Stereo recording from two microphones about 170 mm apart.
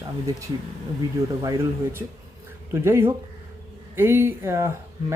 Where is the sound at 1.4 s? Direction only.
15° right (ahead or behind).